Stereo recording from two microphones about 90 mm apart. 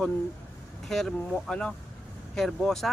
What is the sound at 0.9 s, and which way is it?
Speech, 5° left (ahead or behind).